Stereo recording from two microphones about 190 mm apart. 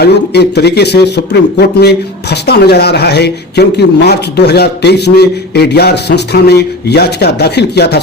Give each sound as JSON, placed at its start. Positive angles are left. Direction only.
{"t": 0.0, "sound": "speech", "side_deg": 60}